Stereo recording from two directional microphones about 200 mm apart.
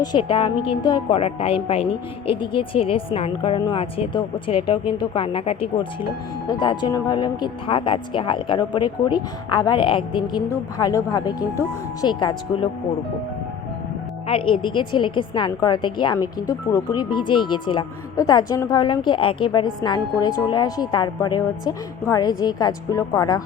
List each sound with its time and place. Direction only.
0.0 s a woman's voice: 25° left (ahead or behind)
14.3 s a woman's voice: 25° left (ahead or behind)